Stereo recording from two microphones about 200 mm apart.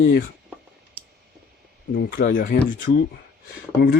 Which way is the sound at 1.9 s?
45° left (ahead or behind).